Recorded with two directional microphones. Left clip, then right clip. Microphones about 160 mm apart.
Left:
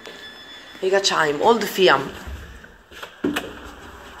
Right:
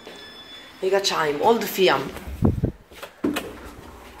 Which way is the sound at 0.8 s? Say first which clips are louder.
Left 3 dB; centre (ahead or behind).